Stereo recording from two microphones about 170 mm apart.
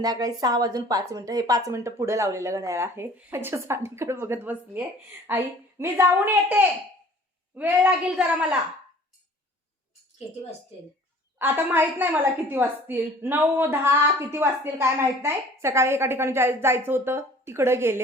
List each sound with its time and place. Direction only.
0.0 s a woman's voice: 20° right (ahead or behind); by 8.5 s 5° right (ahead or behind)
11.3 s a woman's voice: 10° right (ahead or behind)